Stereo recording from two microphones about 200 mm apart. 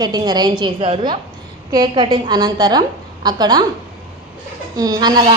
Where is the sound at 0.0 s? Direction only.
20° right (ahead or behind).